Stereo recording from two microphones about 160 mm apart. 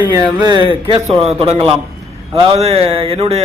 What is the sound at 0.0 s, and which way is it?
A man's voice, 20° right (ahead or behind).